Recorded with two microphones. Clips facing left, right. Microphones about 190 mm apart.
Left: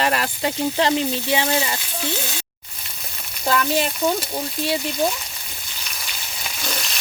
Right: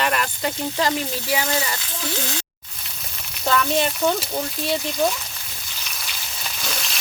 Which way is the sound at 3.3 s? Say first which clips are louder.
Even; 5° left (ahead or behind).